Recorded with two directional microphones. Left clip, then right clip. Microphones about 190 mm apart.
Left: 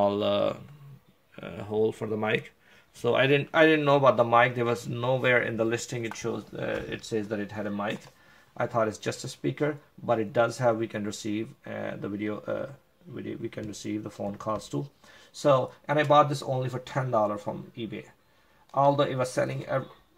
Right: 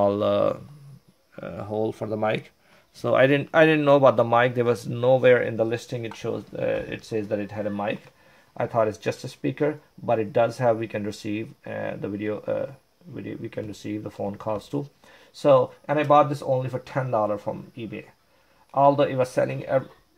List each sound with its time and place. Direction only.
0.0 s speech: 40° right (ahead or behind)
1.3 s speech: 25° right (ahead or behind)
3.0 s speech: 40° right (ahead or behind)